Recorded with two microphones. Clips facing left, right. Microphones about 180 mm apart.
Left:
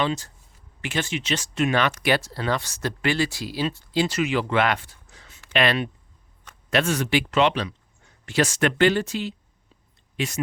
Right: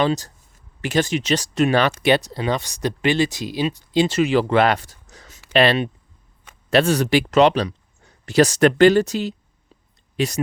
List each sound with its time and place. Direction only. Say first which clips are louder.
0.0 s speech: right 5 dB; 40° right (ahead or behind)
5.5 s speech: right 5 dB; 30° right (ahead or behind)